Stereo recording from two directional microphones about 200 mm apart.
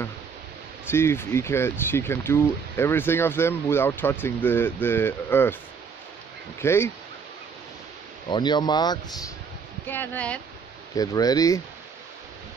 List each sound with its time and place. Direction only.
0.8 s speech: 10° left (ahead or behind)
6.6 s speech: 15° left (ahead or behind)
8.3 s speech: 20° left (ahead or behind)
9.8 s speech: 10° left (ahead or behind)
11.0 s speech: 20° left (ahead or behind)